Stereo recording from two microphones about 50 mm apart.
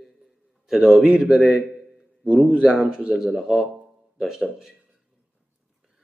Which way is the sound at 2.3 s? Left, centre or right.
Right.